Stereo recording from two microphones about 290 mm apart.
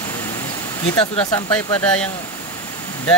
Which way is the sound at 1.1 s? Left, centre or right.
Centre.